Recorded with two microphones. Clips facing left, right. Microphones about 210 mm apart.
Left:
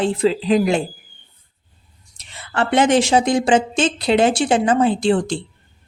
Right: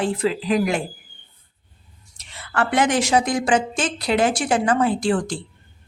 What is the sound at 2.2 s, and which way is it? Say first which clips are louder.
A woman's voice: left 2 dB; 25° left (ahead or behind).